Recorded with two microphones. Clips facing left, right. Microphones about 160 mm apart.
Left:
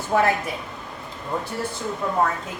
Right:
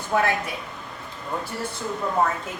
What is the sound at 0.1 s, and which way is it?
Speech, 40° left (ahead or behind).